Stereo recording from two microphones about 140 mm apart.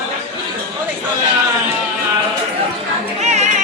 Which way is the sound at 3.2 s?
55° right (ahead or behind).